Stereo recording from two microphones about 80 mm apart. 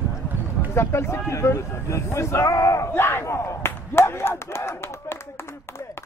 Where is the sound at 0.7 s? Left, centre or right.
Left.